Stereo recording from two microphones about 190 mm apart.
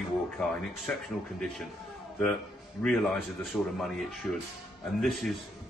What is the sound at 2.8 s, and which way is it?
A man's voice, 5° left (ahead or behind).